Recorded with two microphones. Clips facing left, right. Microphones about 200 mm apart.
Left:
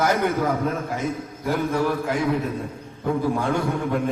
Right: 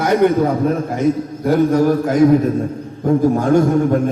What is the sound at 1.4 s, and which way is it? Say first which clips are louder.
A man's voice: right 9 dB; 40° right (ahead or behind).